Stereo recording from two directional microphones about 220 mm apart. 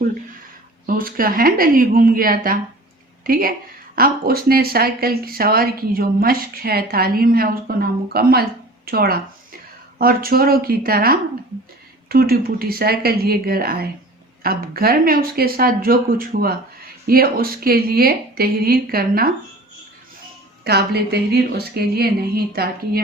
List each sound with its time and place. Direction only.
0.9 s speech: 40° right (ahead or behind)
20.7 s speech: 45° right (ahead or behind)